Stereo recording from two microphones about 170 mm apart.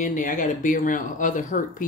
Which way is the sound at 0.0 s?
50° left (ahead or behind).